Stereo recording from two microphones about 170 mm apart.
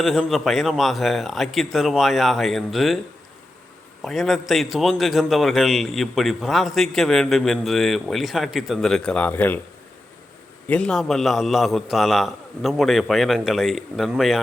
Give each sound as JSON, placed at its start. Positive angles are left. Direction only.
{"t": 0.0, "sound": "a man's voice", "side_deg": 0}
{"t": 4.0, "sound": "a man's voice", "side_deg": 0}
{"t": 10.7, "sound": "a man's voice", "side_deg": 5}